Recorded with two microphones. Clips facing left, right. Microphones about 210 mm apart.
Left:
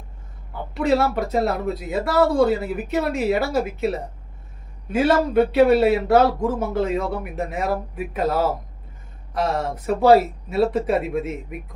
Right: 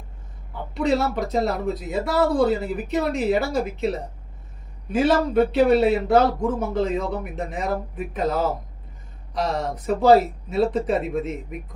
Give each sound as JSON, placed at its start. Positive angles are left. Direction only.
{"t": 0.8, "sound": "speech", "side_deg": 0}